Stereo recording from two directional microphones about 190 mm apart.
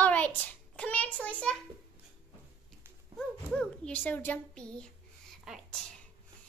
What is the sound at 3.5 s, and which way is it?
A child's voice, 5° left (ahead or behind).